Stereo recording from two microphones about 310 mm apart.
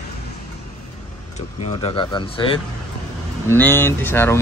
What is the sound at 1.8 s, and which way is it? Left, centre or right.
Speech, centre.